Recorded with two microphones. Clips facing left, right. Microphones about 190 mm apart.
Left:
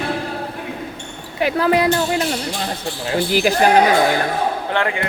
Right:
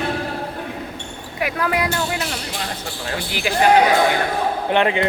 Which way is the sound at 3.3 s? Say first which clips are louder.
Left 8 dB; 40° left (ahead or behind).